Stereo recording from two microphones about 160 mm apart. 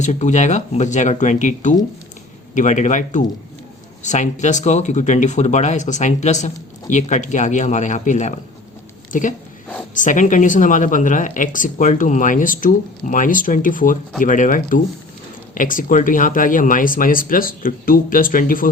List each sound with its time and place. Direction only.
0.0 s speech: 50° left (ahead or behind)